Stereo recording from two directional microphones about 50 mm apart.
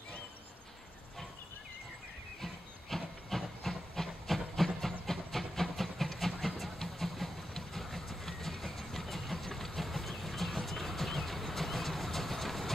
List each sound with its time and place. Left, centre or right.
2.9 s wood: centre
5.6 s vehicle: centre